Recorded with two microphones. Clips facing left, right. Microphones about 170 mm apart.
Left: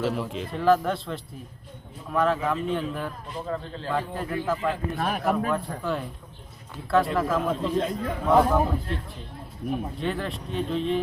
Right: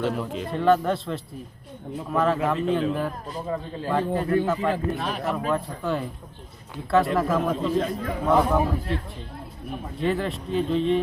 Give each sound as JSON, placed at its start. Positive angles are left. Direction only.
{"t": 0.0, "sound": "a man's voice", "side_deg": 5}
{"t": 3.4, "sound": "a man's voice", "side_deg": -15}
{"t": 4.1, "sound": "a man's voice", "side_deg": 0}
{"t": 4.9, "sound": "speech", "side_deg": 50}
{"t": 5.2, "sound": "a man's voice", "side_deg": 0}
{"t": 10.0, "sound": "a man's voice", "side_deg": 0}